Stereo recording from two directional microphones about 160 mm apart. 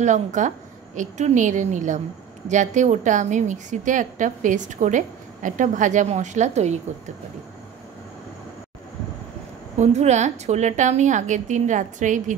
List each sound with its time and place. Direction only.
0.0 s a woman's voice: 50° right (ahead or behind)
9.8 s a woman's voice: 45° right (ahead or behind)